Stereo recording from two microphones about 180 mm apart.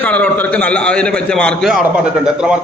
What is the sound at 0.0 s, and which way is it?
A man's voice, 10° left (ahead or behind).